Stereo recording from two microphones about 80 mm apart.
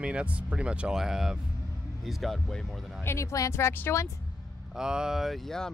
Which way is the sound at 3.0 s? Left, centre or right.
Left.